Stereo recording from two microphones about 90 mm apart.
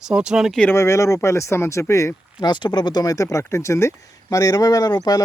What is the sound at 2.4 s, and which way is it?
Speech, 55° left (ahead or behind).